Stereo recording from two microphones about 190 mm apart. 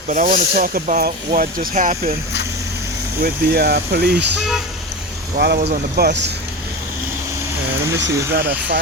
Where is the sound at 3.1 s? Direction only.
50° right (ahead or behind).